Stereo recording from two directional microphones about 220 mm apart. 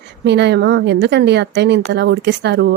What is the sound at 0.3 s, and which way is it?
A woman's voice, 50° right (ahead or behind).